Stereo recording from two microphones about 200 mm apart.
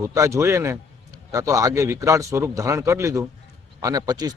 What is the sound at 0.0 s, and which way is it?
A man's voice, 15° right (ahead or behind).